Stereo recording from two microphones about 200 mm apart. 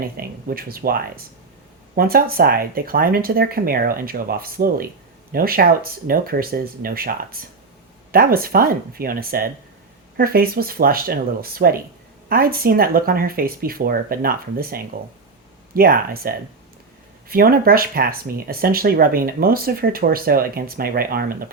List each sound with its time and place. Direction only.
0.2 s speech: 50° right (ahead or behind)